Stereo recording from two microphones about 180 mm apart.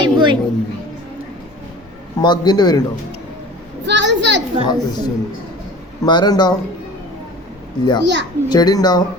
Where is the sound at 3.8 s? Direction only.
75° right (ahead or behind).